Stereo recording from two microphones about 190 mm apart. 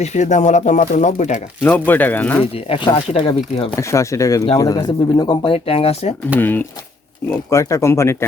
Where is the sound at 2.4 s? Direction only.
30° left (ahead or behind).